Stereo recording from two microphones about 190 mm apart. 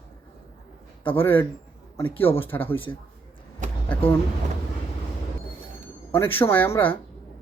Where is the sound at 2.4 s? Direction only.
10° left (ahead or behind).